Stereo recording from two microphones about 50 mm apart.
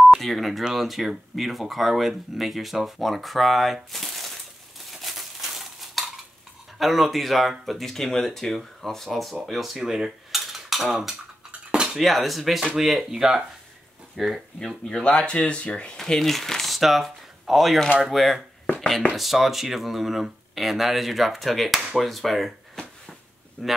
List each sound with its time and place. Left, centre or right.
0.2 s speech: centre
4.9 s a sound: centre
6.8 s speech: centre
9.8 s cutlery: centre
11.9 s speech: centre
14.9 s speech: centre
16.0 s speech: centre
18.8 s a sound: centre
19.1 s speech: centre